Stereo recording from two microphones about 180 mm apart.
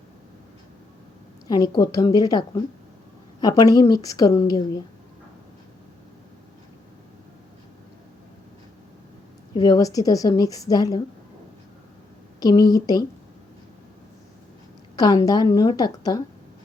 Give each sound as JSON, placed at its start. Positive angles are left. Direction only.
{"t": 1.5, "sound": "a woman's voice", "side_deg": 20}
{"t": 3.4, "sound": "a woman's voice", "side_deg": 20}
{"t": 9.6, "sound": "a woman's voice", "side_deg": 20}
{"t": 12.4, "sound": "a woman's voice", "side_deg": 20}
{"t": 14.9, "sound": "a woman's voice", "side_deg": 20}